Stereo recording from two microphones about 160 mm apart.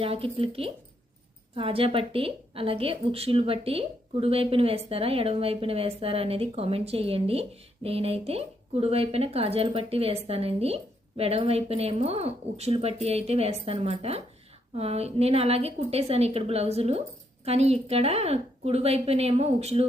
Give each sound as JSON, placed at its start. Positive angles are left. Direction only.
{"t": 0.0, "sound": "a woman's voice", "side_deg": -35}